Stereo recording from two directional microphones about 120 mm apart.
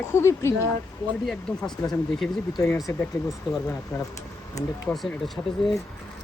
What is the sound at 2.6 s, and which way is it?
Speech, 25° left (ahead or behind).